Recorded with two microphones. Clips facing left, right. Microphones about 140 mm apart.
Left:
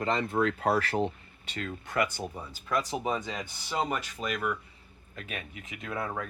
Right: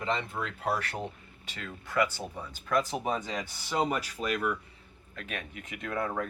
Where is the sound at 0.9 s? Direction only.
30° left (ahead or behind); by 2.6 s 10° left (ahead or behind).